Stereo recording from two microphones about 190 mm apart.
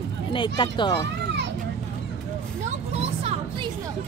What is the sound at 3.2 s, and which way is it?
Music, 35° right (ahead or behind).